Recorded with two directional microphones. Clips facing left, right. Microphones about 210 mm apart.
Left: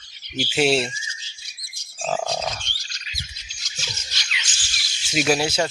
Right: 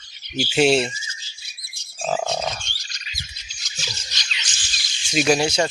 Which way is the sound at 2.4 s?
10° right (ahead or behind).